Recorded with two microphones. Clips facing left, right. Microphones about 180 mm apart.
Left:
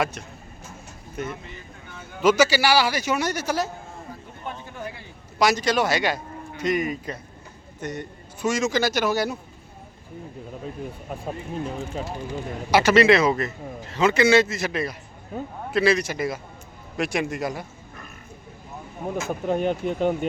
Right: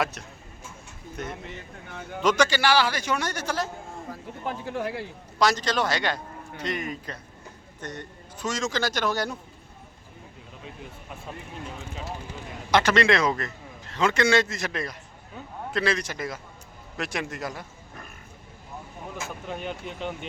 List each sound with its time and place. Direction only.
0.0 s a man's voice: centre (ahead or behind)
4.6 s a man's voice: 90° right
5.4 s a man's voice: 10° left (ahead or behind)
11.1 s speech: 40° left (ahead or behind)
12.7 s a man's voice: 5° left (ahead or behind)
15.3 s speech: 40° left (ahead or behind)
15.7 s a man's voice: 10° left (ahead or behind)
19.0 s speech: 45° left (ahead or behind)